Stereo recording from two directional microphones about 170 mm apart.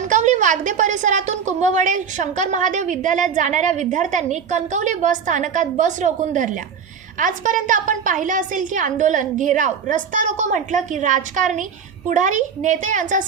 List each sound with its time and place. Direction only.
0.0 s a woman's voice: 45° right (ahead or behind)